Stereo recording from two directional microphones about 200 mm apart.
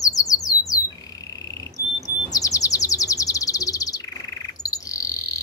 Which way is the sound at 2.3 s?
15° left (ahead or behind).